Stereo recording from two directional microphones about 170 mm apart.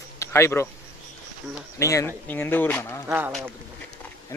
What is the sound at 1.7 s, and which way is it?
Speech, 20° left (ahead or behind).